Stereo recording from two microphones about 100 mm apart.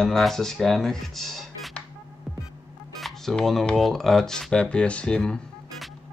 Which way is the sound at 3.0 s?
Centre (ahead or behind).